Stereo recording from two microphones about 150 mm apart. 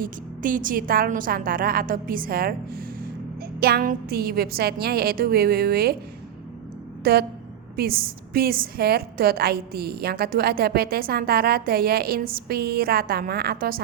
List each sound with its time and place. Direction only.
0.0 s a woman's voice: 65° right (ahead or behind); by 6.0 s 90° right
7.0 s a woman's voice: 90° right